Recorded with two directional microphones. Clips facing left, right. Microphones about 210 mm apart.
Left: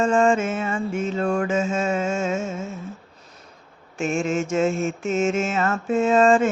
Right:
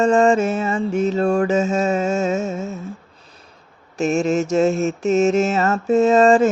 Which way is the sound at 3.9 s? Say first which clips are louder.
Right 5 dB; 40° right (ahead or behind).